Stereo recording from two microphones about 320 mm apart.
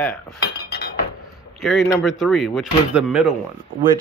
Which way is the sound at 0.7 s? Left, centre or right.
Left.